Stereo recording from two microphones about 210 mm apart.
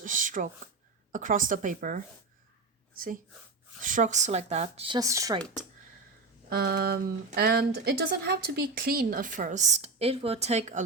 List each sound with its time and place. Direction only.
0.0 s a sound: 40° right (ahead or behind)
1.1 s speech: 40° right (ahead or behind)
3.8 s speech: 40° right (ahead or behind)
4.9 s speech: 15° right (ahead or behind)
6.5 s a sound: 50° right (ahead or behind)
7.3 s speech: 50° right (ahead or behind); by 10.8 s 35° right (ahead or behind)